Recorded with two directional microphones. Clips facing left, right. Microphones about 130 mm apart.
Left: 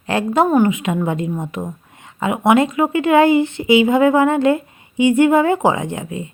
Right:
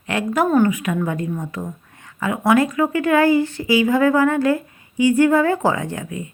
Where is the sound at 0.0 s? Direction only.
30° left (ahead or behind).